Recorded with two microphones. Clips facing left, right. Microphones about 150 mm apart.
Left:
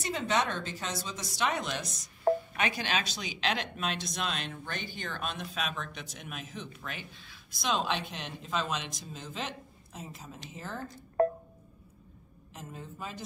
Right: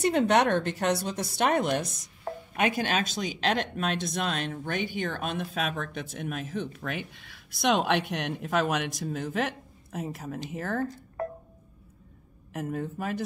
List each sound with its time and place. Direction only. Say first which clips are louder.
0.0 s speech: right 8 dB; 60° right (ahead or behind)
12.5 s speech: right 11 dB; 60° right (ahead or behind)